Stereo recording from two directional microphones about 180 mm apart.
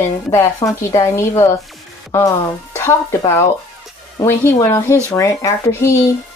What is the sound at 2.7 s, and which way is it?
A woman's voice, 15° left (ahead or behind).